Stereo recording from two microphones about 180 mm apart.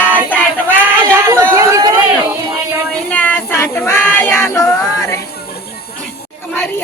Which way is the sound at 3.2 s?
10° left (ahead or behind).